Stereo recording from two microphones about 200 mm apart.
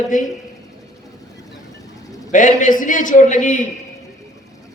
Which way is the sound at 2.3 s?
40° left (ahead or behind).